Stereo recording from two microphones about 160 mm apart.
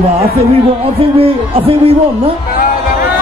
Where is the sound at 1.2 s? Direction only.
35° right (ahead or behind).